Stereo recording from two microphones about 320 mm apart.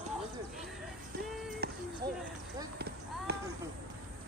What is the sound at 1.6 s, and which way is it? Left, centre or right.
Music, right.